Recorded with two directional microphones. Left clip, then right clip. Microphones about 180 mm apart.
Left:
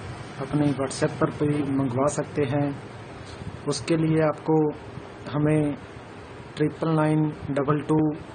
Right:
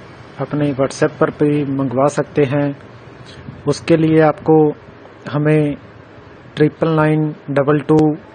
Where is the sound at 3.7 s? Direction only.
35° right (ahead or behind).